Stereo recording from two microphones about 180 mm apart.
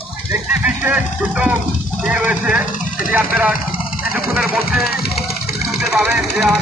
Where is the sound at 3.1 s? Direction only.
10° right (ahead or behind).